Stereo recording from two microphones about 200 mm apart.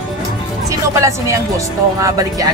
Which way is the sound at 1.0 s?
15° right (ahead or behind).